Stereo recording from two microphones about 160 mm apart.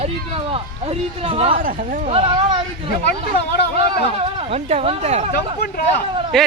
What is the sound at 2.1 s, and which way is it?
Speech, 35° right (ahead or behind).